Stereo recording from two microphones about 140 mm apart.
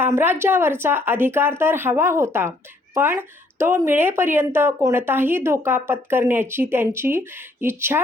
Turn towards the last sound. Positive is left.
turn(degrees=-15)  # may be behind; listen again after turning